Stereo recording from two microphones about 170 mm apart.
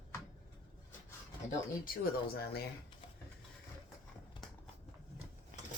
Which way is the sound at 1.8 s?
65° left (ahead or behind).